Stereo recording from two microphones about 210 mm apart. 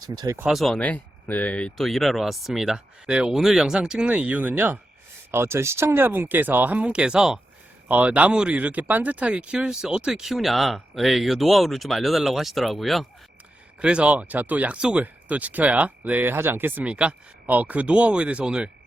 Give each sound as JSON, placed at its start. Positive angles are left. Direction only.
{"t": 0.0, "sound": "speech", "side_deg": -20}
{"t": 0.3, "sound": "speech", "side_deg": 0}